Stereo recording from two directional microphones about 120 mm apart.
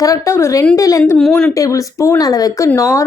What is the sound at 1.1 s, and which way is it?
Speech, 5° left (ahead or behind).